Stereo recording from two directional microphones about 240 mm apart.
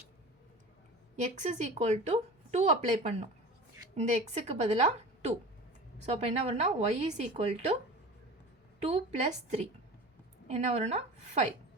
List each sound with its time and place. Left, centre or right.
1.2 s speech: right
8.8 s speech: right